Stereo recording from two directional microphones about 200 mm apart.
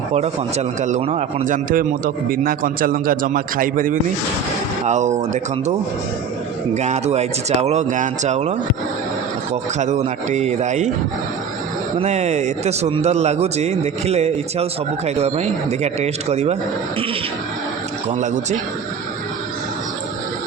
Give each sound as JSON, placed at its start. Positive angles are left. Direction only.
{"t": 0.1, "sound": "a man's voice", "side_deg": -30}
{"t": 6.7, "sound": "speech", "side_deg": -35}
{"t": 11.9, "sound": "speech", "side_deg": -35}
{"t": 18.1, "sound": "speech", "side_deg": -35}